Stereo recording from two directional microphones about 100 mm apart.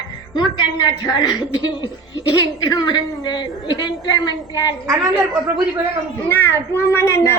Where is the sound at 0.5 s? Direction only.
45° left (ahead or behind).